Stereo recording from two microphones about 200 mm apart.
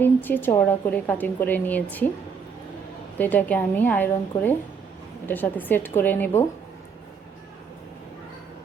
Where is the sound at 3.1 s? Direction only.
10° left (ahead or behind).